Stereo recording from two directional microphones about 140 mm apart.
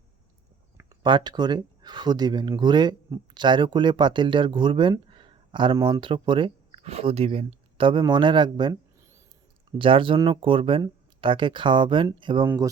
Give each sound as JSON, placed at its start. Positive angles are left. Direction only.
{"t": 1.0, "sound": "speech", "side_deg": -35}